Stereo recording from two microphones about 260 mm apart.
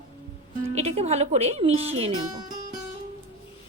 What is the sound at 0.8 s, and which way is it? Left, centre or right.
Speech, right.